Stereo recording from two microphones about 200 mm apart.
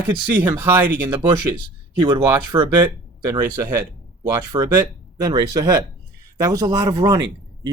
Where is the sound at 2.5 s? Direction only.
25° right (ahead or behind).